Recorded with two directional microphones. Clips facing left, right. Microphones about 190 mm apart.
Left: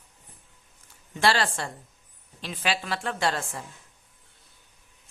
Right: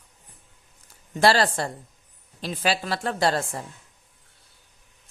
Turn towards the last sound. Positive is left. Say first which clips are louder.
# right 4 dB
turn(degrees=-40)  # may be behind; listen again after turning